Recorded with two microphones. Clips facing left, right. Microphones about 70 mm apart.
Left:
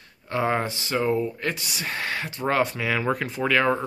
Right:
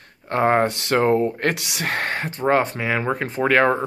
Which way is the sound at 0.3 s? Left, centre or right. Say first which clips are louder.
Right 6 dB; right.